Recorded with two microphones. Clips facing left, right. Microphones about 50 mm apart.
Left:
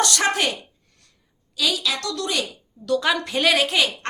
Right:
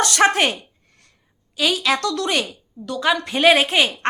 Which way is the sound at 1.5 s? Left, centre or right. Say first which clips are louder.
Right 4 dB; right.